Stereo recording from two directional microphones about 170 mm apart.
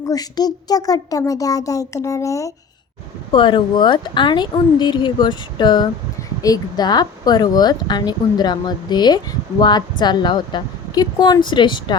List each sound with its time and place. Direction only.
0.0 s speech: 20° left (ahead or behind)
3.3 s speech: 30° left (ahead or behind)